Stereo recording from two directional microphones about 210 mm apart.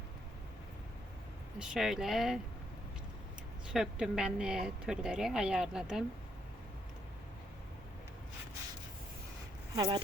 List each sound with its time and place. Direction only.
1.5 s speech: 5° right (ahead or behind)
3.7 s speech: 5° right (ahead or behind)
9.7 s speech: 20° right (ahead or behind)